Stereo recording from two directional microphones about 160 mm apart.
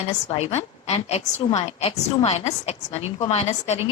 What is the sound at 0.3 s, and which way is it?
A woman's voice, 40° left (ahead or behind).